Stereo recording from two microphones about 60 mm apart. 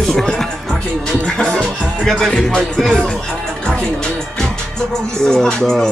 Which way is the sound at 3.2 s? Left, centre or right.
Centre.